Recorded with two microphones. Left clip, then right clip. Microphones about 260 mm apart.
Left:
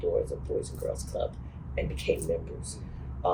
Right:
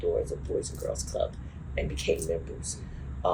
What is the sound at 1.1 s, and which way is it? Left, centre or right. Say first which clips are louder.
Speech: right 2 dB; right.